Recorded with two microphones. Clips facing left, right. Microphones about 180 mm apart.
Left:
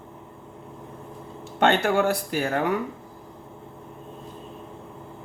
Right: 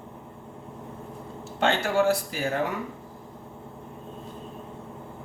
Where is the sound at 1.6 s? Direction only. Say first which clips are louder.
Left 2 dB; 60° left (ahead or behind).